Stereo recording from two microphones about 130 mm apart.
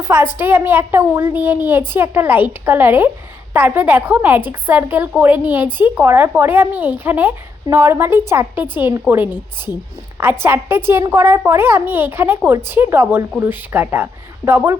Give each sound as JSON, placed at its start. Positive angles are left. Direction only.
{"t": 0.0, "sound": "a woman's voice", "side_deg": -20}